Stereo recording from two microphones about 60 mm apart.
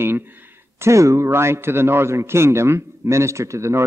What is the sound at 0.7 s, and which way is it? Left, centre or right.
A man's voice, right.